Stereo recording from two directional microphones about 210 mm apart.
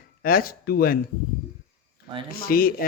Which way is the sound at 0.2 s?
45° left (ahead or behind).